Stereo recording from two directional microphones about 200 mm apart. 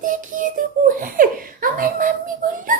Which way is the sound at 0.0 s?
40° right (ahead or behind).